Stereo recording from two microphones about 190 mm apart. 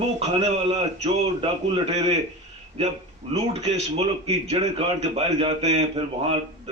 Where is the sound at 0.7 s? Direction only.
35° right (ahead or behind).